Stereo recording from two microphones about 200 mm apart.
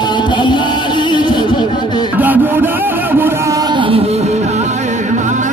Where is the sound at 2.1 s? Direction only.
10° right (ahead or behind); by 4.6 s 35° right (ahead or behind).